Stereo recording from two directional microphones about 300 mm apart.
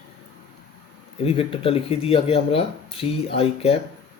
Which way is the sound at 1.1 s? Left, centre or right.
Centre.